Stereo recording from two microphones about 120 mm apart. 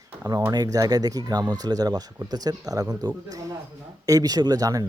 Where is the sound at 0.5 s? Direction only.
30° right (ahead or behind).